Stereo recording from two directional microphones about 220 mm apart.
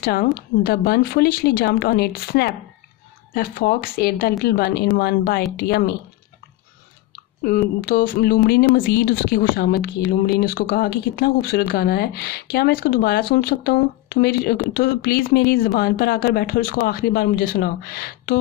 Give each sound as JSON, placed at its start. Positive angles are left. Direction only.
{"t": 0.0, "sound": "speech", "side_deg": 45}
{"t": 7.8, "sound": "a sound", "side_deg": 40}
{"t": 8.5, "sound": "speech", "side_deg": 45}